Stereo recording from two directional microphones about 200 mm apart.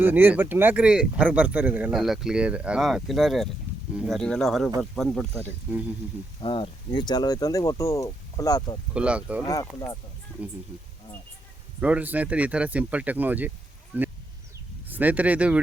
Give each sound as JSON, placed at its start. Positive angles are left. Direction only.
{"t": 0.0, "sound": "speech", "side_deg": -10}
{"t": 6.4, "sound": "speech", "side_deg": 25}
{"t": 8.9, "sound": "speech", "side_deg": -5}
{"t": 9.5, "sound": "speech", "side_deg": 15}
{"t": 11.8, "sound": "speech", "side_deg": -5}
{"t": 13.9, "sound": "a sound", "side_deg": -5}
{"t": 14.8, "sound": "speech", "side_deg": -10}